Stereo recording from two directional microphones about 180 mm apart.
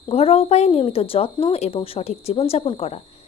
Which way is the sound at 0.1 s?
35° left (ahead or behind).